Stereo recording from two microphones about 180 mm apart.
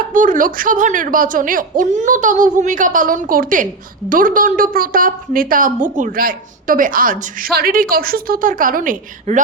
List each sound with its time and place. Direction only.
0.1 s a woman's voice: 45° right (ahead or behind)